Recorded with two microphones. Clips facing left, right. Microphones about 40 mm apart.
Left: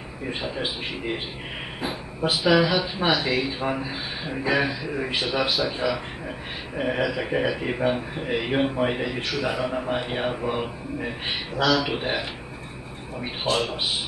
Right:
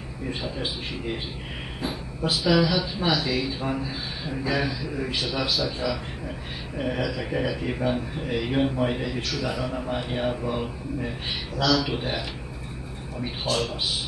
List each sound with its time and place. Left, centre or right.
0.3 s a man's voice: left